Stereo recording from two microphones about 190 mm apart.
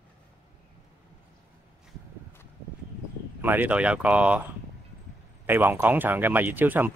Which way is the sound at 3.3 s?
10° right (ahead or behind).